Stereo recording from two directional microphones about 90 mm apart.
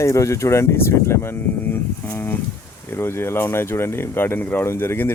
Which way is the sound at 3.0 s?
25° left (ahead or behind).